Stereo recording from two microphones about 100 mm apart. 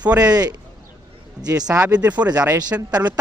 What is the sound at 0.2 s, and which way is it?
Speech, 40° right (ahead or behind).